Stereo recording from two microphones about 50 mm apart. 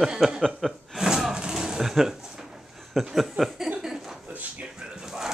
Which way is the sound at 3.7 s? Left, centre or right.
Centre.